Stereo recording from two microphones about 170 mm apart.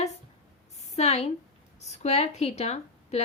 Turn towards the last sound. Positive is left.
turn(degrees=40)  # may be behind; listen again after turning